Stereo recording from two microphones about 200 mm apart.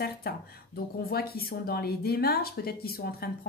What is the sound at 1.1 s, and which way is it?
Speech, 50° left (ahead or behind).